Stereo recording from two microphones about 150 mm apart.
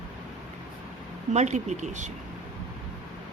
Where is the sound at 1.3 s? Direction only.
50° right (ahead or behind).